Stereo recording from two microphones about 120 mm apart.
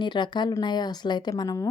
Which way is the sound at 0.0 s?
40° left (ahead or behind).